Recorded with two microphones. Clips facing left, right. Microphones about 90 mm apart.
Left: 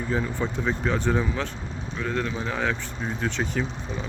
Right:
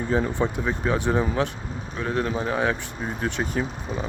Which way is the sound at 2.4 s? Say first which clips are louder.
Right 3 dB; 15° right (ahead or behind).